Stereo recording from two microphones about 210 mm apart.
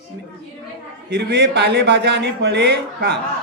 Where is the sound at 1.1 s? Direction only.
50° right (ahead or behind).